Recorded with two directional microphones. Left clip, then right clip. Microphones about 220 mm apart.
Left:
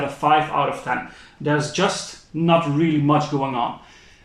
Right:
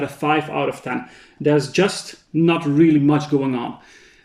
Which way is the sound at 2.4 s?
50° right (ahead or behind).